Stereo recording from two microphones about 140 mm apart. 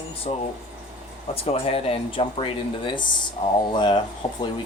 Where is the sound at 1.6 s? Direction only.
40° left (ahead or behind).